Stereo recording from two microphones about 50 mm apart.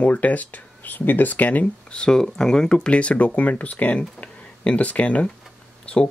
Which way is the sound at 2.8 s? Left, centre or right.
Left.